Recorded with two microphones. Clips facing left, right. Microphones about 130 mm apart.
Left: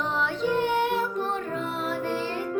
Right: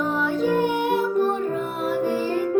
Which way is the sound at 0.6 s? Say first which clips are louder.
Right 3 dB; 10° right (ahead or behind).